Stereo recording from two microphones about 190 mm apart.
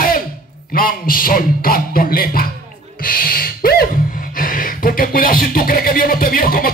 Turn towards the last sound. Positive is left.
turn(degrees=50)  # may be behind; listen again after turning